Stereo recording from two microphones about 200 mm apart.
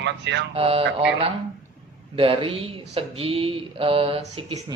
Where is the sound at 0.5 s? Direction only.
30° right (ahead or behind).